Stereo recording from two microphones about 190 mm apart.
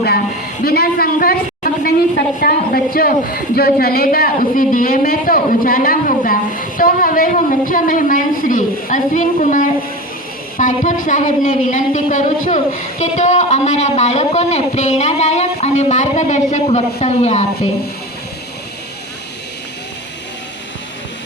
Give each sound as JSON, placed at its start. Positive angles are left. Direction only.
{"t": 0.6, "sound": "a woman's voice", "side_deg": 55}